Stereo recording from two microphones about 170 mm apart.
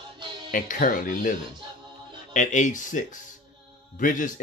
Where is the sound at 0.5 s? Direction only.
55° left (ahead or behind).